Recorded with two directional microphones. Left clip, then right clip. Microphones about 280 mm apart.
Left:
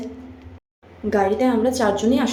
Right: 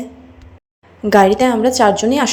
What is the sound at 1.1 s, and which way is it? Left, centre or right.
A woman's voice, right.